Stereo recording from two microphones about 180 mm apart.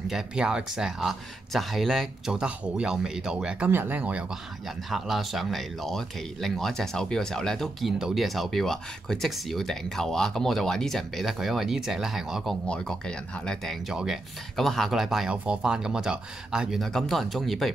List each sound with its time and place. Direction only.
0.1 s speech: 5° right (ahead or behind)